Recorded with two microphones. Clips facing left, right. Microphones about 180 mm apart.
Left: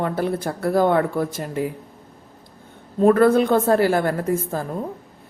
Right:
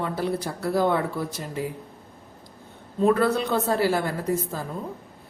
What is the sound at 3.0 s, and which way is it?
A woman's voice, 50° left (ahead or behind).